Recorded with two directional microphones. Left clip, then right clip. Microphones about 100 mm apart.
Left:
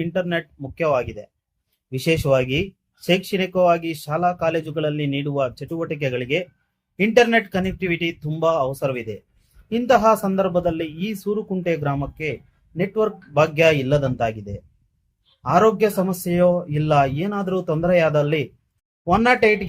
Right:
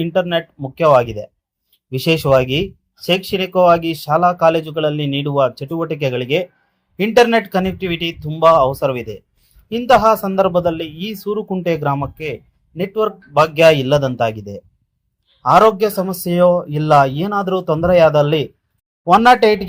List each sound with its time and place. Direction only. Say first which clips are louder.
0.0 s speech: right 6 dB; 20° right (ahead or behind)